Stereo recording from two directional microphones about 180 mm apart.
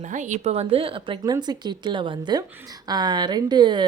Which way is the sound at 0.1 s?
40° right (ahead or behind).